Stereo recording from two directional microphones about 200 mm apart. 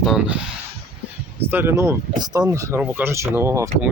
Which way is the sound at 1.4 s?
10° right (ahead or behind).